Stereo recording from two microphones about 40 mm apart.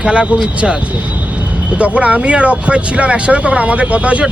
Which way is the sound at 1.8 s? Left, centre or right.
Right.